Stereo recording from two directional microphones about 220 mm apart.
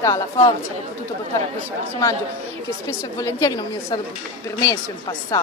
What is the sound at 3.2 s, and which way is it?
Speech, 15° left (ahead or behind).